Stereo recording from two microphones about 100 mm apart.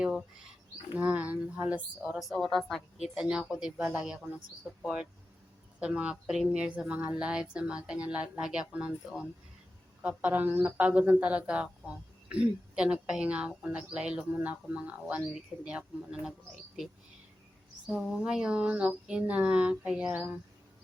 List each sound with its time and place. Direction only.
0.0 s speech: 5° right (ahead or behind)
2.3 s a woman's voice: 5° left (ahead or behind)
3.2 s speech: 5° right (ahead or behind)
3.8 s speech: 20° right (ahead or behind)
5.8 s speech: 10° right (ahead or behind)
17.8 s speech: 5° right (ahead or behind)